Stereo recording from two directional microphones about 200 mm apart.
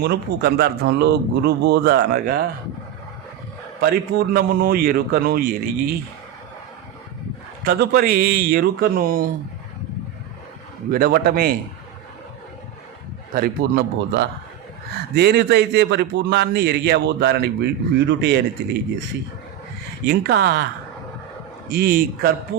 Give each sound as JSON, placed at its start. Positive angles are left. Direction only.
{"t": 0.0, "sound": "speech", "side_deg": -55}
{"t": 3.8, "sound": "speech", "side_deg": -50}
{"t": 7.6, "sound": "speech", "side_deg": -50}
{"t": 10.9, "sound": "speech", "side_deg": -50}
{"t": 13.3, "sound": "a man's voice", "side_deg": -50}
{"t": 20.1, "sound": "a man's voice", "side_deg": -55}
{"t": 21.7, "sound": "speech", "side_deg": -50}